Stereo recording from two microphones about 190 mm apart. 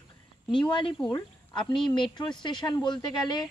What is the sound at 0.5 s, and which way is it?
Speech, 25° left (ahead or behind).